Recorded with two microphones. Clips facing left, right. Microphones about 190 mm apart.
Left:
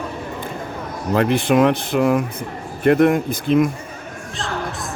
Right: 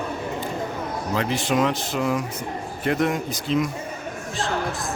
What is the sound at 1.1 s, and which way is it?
Speech, 55° left (ahead or behind).